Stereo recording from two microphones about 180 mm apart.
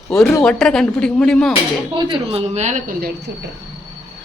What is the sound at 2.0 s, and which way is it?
Speech, 30° right (ahead or behind).